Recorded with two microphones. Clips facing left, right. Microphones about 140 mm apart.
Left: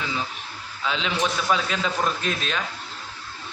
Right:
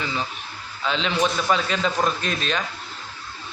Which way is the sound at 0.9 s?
5° left (ahead or behind).